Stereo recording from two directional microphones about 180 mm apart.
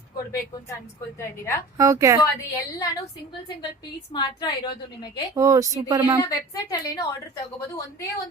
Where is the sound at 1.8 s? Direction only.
15° right (ahead or behind).